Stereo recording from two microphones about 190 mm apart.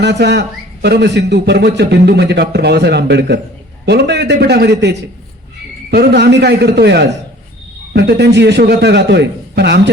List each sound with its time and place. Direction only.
0.0 s a man's voice: 65° right (ahead or behind)
5.9 s a man's voice: 55° right (ahead or behind)